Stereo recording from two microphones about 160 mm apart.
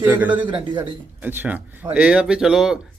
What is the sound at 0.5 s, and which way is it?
Speech, 30° right (ahead or behind).